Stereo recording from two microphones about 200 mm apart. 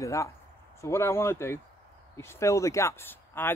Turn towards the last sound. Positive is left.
turn(degrees=10)  # may be behind; listen again after turning